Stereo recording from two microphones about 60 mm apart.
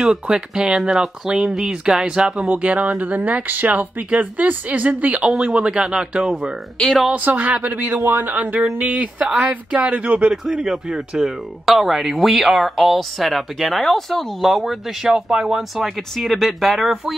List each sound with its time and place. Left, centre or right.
0.0 s speech: centre
2.5 s speech: right
10.3 s speech: centre